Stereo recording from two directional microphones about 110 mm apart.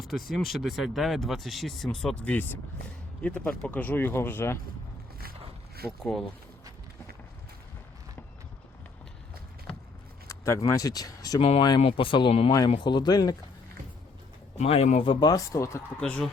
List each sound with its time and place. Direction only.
0.0 s speech: centre (ahead or behind); by 4.5 s 20° left (ahead or behind)
5.8 s speech: 30° left (ahead or behind)
10.2 s keys jangling: 25° left (ahead or behind)
10.7 s speech: 35° left (ahead or behind)
11.3 s speech: 60° left (ahead or behind)
12.5 s speech: 40° left (ahead or behind)
14.6 s speech: 75° left (ahead or behind)
15.0 s speech: 45° left (ahead or behind); by 15.8 s 30° left (ahead or behind)
16.0 s speech: 10° left (ahead or behind)